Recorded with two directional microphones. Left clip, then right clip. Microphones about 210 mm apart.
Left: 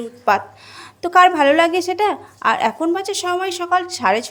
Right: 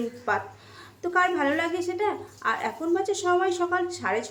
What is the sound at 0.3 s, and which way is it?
A woman's voice, 45° left (ahead or behind).